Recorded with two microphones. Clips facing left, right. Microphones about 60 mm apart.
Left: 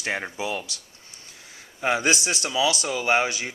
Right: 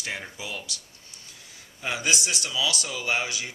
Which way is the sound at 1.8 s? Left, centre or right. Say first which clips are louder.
Left 5 dB; left.